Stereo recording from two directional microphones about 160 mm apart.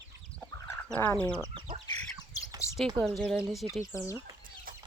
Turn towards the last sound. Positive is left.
turn(degrees=0)  # may be behind; listen again after turning